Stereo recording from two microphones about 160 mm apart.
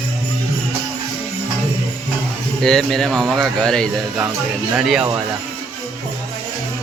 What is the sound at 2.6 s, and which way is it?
Speech, 5° left (ahead or behind).